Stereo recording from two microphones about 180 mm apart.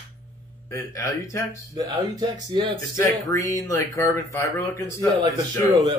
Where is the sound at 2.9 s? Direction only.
15° left (ahead or behind).